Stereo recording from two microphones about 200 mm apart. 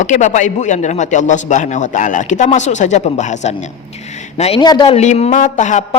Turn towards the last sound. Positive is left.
turn(degrees=35)  # may be behind; listen again after turning